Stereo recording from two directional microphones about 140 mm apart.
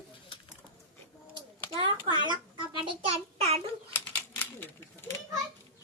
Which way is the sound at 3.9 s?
15° left (ahead or behind).